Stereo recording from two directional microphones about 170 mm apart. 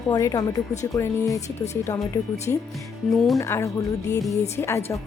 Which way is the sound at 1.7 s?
15° left (ahead or behind).